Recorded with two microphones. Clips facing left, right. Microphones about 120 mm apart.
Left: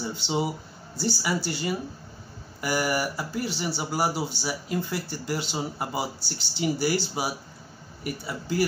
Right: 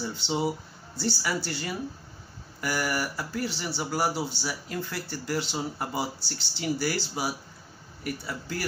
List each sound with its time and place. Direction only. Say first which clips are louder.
0.0 s speech: left 1 dB; 15° left (ahead or behind)